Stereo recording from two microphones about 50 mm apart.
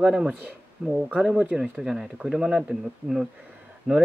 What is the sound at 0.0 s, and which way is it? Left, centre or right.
Speech, centre.